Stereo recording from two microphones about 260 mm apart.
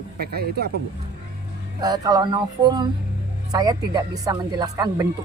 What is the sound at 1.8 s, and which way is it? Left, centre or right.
Speech, centre.